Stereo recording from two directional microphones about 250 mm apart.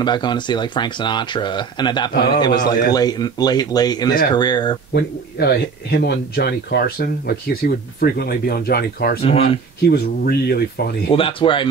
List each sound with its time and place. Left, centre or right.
0.0 s speech: centre
4.9 s speech: left
9.2 s speech: left
9.8 s speech: left
11.1 s speech: left